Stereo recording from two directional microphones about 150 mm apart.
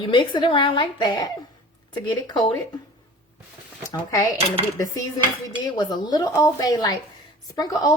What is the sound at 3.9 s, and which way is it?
Speech, 25° left (ahead or behind).